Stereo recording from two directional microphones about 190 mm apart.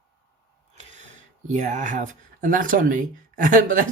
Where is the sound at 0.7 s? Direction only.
40° right (ahead or behind).